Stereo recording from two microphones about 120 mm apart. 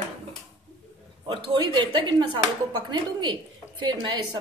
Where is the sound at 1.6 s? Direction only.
40° right (ahead or behind).